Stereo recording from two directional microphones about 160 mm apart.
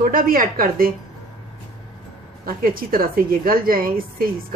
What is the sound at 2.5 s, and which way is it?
A woman's voice, 65° right (ahead or behind).